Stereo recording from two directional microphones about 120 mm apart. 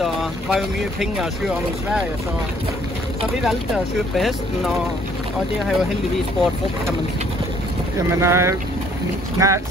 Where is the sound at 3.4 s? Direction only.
Centre (ahead or behind).